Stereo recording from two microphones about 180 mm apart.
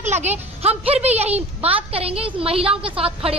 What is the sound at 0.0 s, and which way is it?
Speech, 40° right (ahead or behind).